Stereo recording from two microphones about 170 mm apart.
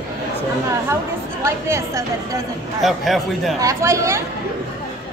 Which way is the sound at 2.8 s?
Centre (ahead or behind).